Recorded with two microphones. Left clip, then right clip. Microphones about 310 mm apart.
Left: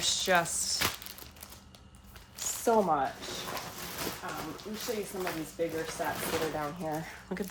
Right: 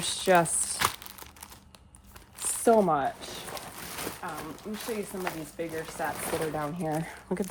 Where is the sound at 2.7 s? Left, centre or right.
Right.